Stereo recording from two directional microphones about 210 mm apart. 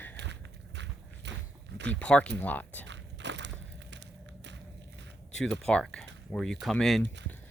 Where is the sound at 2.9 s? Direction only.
55° right (ahead or behind).